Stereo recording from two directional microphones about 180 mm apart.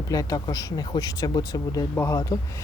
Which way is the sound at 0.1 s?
20° left (ahead or behind).